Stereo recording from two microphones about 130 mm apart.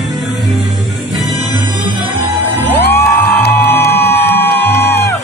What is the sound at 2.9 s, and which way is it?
Music, 15° left (ahead or behind).